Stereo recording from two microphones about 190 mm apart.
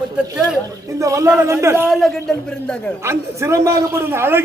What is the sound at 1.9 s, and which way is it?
Speech, centre (ahead or behind).